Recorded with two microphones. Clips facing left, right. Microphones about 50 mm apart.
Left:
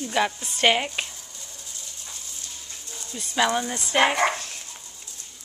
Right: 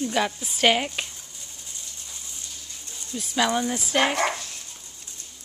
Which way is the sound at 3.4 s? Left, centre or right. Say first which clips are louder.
Even; centre.